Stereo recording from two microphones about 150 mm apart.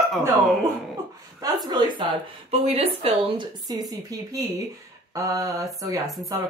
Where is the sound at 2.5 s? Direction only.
40° right (ahead or behind).